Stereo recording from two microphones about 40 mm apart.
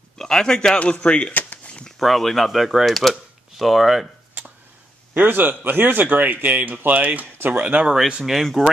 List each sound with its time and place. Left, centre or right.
0.2 s a man's voice: centre
1.0 s speech: left
2.0 s speech: centre
5.1 s a man's voice: right
5.9 s speech: right
8.3 s speech: centre